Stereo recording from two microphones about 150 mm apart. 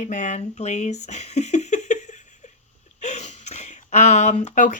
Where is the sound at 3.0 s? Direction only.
50° left (ahead or behind).